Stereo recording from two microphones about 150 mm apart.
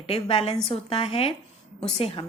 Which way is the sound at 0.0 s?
40° left (ahead or behind).